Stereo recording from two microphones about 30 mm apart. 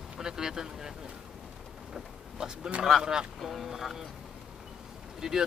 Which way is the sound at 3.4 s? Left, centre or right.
Centre.